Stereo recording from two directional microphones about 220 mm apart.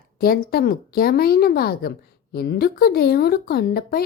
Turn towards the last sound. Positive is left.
turn(degrees=45)  # may be behind; listen again after turning